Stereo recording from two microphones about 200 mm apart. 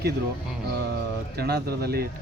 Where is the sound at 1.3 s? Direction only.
55° right (ahead or behind).